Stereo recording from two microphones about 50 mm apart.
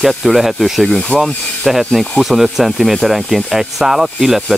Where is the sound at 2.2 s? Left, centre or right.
Centre.